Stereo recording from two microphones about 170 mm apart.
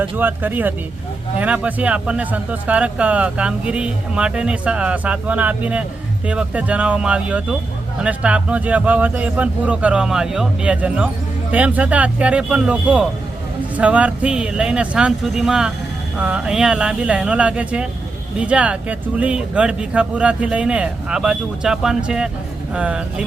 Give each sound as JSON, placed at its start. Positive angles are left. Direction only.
{"t": 0.0, "sound": "speech", "side_deg": -10}